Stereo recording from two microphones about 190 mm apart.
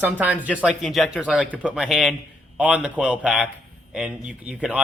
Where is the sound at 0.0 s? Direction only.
10° right (ahead or behind).